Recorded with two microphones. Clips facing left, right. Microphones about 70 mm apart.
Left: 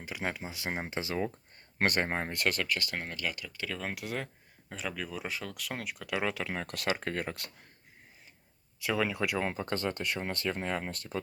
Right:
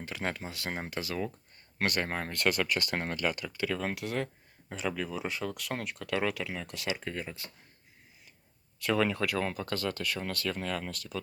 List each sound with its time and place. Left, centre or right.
0.0 s speech: centre
2.6 s speech: right
3.5 s speech: centre
6.3 s speech: left
8.8 s speech: centre; by 11.2 s left